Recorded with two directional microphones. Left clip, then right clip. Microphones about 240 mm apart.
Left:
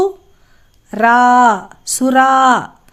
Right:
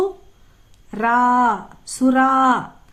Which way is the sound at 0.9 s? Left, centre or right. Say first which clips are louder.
Left 7 dB; left.